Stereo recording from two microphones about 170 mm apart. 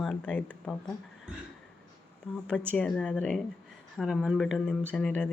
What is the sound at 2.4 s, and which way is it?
Speech, 5° left (ahead or behind).